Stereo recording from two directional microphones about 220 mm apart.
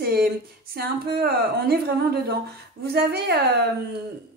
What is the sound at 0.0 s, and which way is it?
Speech, 45° right (ahead or behind).